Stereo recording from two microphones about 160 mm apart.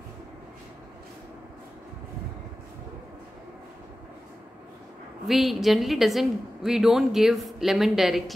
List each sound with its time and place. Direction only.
5.2 s a woman's voice: centre (ahead or behind)